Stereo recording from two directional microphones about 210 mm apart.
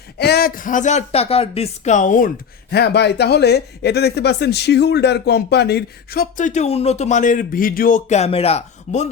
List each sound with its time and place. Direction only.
0.2 s speech: 50° left (ahead or behind); by 9.0 s 30° left (ahead or behind)